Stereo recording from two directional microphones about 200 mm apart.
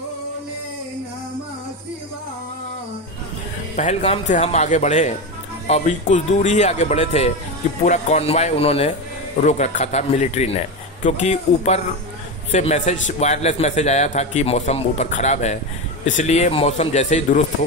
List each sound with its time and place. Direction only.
3.7 s a man's voice: 30° left (ahead or behind)